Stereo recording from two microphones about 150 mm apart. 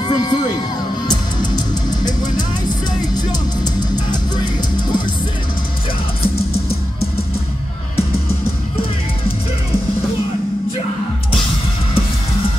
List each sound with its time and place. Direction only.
0.0 s music: 30° left (ahead or behind)